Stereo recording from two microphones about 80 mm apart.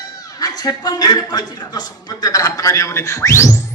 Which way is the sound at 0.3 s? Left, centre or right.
Left.